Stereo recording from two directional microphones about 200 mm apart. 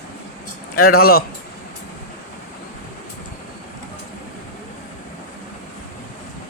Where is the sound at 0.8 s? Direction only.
50° left (ahead or behind).